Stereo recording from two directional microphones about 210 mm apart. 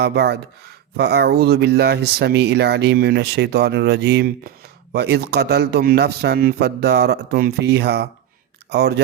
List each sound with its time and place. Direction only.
0.0 s speech: 55° right (ahead or behind)